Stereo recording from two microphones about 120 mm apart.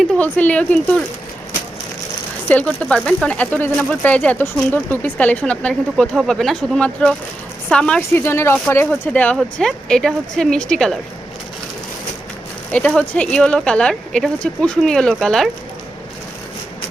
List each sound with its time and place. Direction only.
0.0 s speech: 10° left (ahead or behind)
2.5 s speech: 10° left (ahead or behind)
8.2 s speech: 20° left (ahead or behind)
12.7 s speech: 10° left (ahead or behind)